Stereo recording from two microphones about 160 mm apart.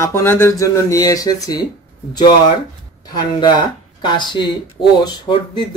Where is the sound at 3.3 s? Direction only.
30° left (ahead or behind).